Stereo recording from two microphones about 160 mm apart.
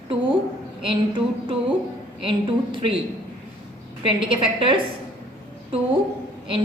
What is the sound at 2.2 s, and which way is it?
Speech, 30° right (ahead or behind).